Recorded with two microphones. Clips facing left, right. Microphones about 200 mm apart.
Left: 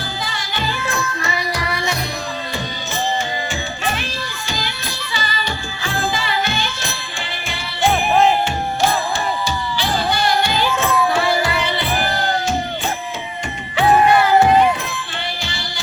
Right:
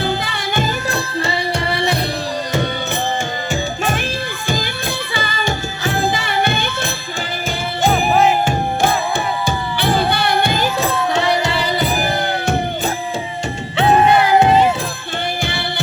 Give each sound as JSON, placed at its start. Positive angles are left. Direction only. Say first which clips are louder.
{"t": 0.0, "sound": "music", "louder": "right 7 dB", "side_deg": -60}
{"t": 0.9, "sound": "music", "louder": "right 3 dB", "side_deg": -30}
{"t": 4.4, "sound": "music", "louder": "right 7 dB", "side_deg": -50}
{"t": 6.1, "sound": "music", "louder": "right 1 dB", "side_deg": -60}
{"t": 7.9, "sound": "music", "louder": "even", "side_deg": 0}
{"t": 8.4, "sound": "music", "louder": "right 2 dB", "side_deg": -55}
{"t": 10.9, "sound": "music", "louder": "even", "side_deg": -20}
{"t": 11.5, "sound": "music", "louder": "right 2 dB", "side_deg": -40}
{"t": 13.7, "sound": "music", "louder": "right 1 dB", "side_deg": -20}